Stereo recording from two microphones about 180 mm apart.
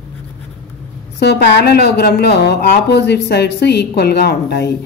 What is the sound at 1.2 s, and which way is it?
A woman's voice, 65° left (ahead or behind).